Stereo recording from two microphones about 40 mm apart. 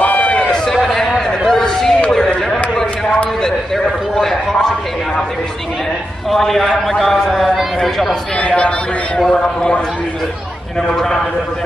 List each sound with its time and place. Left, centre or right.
0.2 s run: left
0.8 s a sound: centre
6.3 s a man's voice: centre
8.4 s a man's voice: left